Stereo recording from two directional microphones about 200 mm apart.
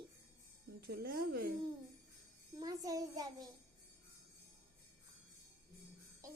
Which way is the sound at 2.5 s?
20° right (ahead or behind).